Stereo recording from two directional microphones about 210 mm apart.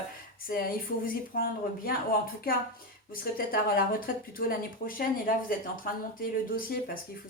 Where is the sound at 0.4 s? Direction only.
45° left (ahead or behind).